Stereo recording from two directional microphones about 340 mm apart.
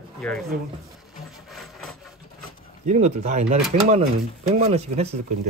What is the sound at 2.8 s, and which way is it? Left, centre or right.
Speech, centre.